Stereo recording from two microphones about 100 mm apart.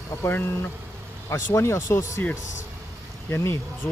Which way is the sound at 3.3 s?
25° left (ahead or behind).